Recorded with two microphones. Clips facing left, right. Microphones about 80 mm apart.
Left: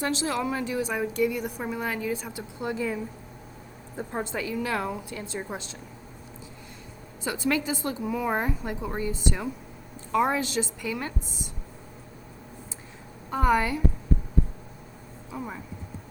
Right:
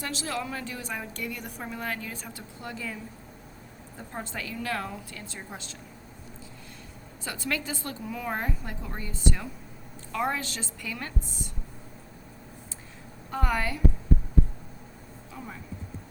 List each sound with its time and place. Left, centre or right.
0.0 s a woman's voice: left
7.3 s a woman's voice: centre
13.3 s a woman's voice: centre
15.3 s a woman's voice: centre